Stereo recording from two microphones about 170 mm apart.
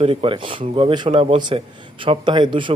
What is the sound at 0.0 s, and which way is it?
A man's voice, 30° right (ahead or behind).